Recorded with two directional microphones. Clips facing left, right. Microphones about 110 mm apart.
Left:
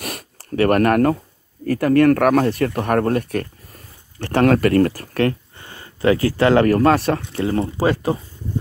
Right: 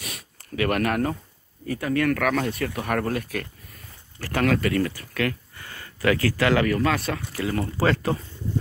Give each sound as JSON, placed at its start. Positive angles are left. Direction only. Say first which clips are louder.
{"t": 0.0, "sound": "a sound", "louder": "left 9 dB", "side_deg": 45}
{"t": 1.7, "sound": "speech", "louder": "left 9 dB", "side_deg": 55}
{"t": 4.6, "sound": "speech", "louder": "left 8 dB", "side_deg": 50}
{"t": 5.6, "sound": "a sound", "louder": "left 6 dB", "side_deg": 20}
{"t": 6.6, "sound": "speech", "louder": "left 8 dB", "side_deg": 45}
{"t": 7.3, "sound": "speech", "louder": "left 6 dB", "side_deg": 30}
{"t": 7.7, "sound": "speech", "louder": "left 4 dB", "side_deg": 15}